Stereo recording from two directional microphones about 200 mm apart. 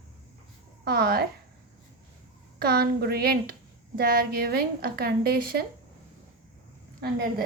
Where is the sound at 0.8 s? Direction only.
50° right (ahead or behind).